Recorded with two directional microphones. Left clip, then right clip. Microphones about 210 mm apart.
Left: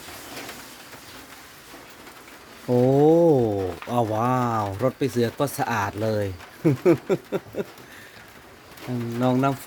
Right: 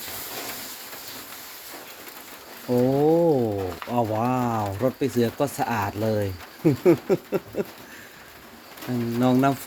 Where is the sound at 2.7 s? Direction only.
35° left (ahead or behind); by 7.7 s 10° left (ahead or behind).